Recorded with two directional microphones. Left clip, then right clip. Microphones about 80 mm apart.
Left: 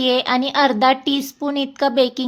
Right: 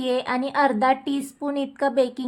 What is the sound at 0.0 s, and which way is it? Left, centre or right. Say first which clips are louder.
A woman's voice: left 6 dB; left.